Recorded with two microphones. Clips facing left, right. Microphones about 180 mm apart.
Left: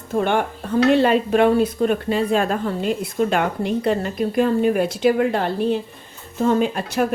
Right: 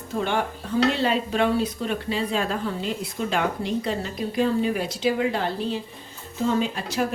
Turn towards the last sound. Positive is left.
turn(degrees=55)  # may be behind; listen again after turning